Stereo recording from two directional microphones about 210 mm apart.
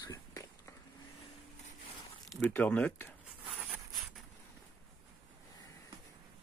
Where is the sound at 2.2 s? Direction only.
5° left (ahead or behind).